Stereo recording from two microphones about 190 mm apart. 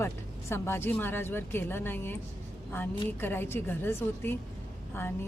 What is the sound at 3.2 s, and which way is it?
Speech, 10° left (ahead or behind).